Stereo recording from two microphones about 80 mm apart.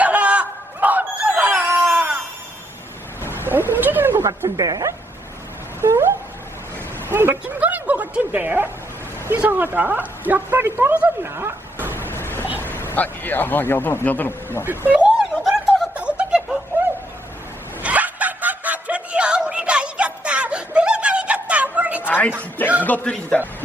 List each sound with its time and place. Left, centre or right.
0.0 s a sound: centre
3.4 s cat: right
4.4 s a woman's voice: right
5.8 s a sound: right
7.1 s a woman's voice: right
11.3 s dog: right
11.9 s a sound: left
12.7 s a man's voice: left
14.6 s a woman's voice: right
15.4 s snicker: centre
17.8 s snicker: centre
22.0 s a sound: left
22.8 s a man's voice: left